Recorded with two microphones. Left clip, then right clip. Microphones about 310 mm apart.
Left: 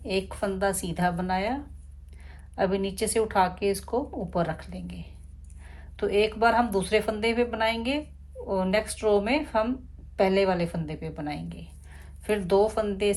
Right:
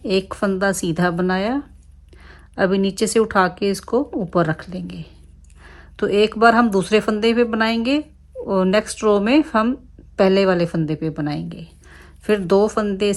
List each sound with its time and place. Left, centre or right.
0.0 s speech: centre